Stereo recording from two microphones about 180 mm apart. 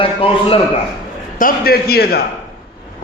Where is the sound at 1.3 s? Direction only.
55° left (ahead or behind).